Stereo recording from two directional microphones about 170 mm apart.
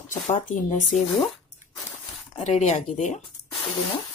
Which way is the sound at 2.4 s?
40° left (ahead or behind).